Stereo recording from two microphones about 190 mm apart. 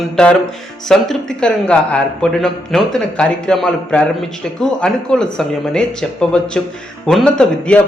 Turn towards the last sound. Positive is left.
turn(degrees=5)  # may be behind; listen again after turning